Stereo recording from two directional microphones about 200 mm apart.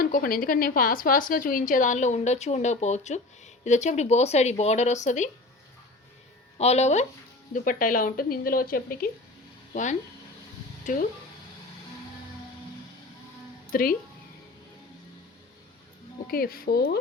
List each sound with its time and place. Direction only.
0.0 s a woman's voice: 45° left (ahead or behind)
6.6 s a woman's voice: 35° left (ahead or behind)
13.7 s speech: 45° left (ahead or behind)
16.2 s speech: 50° left (ahead or behind)